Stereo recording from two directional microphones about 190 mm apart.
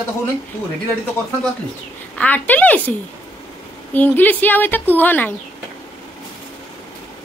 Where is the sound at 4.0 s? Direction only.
10° left (ahead or behind).